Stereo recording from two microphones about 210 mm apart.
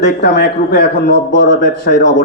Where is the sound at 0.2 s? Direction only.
50° left (ahead or behind).